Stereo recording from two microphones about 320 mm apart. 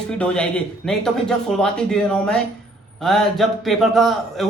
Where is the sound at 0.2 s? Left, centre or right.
Centre.